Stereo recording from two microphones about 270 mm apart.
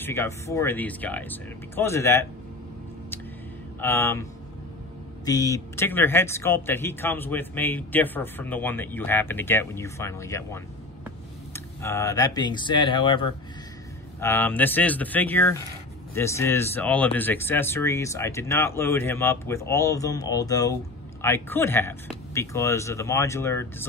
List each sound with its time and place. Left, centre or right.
0.0 s speech: centre
3.8 s speech: centre
14.2 s speech: centre